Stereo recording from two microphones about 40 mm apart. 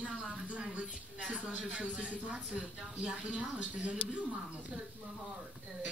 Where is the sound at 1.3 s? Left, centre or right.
Right.